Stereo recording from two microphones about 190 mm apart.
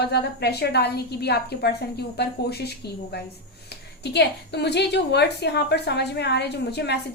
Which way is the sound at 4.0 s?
60° left (ahead or behind).